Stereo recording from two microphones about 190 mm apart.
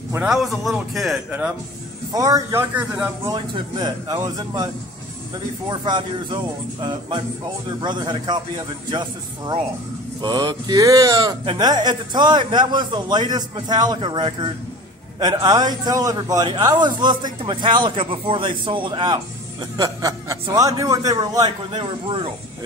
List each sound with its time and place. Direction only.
0.1 s a man's voice: 5° right (ahead or behind)
2.1 s a man's voice: 15° right (ahead or behind)
3.3 s speech: 25° right (ahead or behind)
5.7 s speech: 25° right (ahead or behind)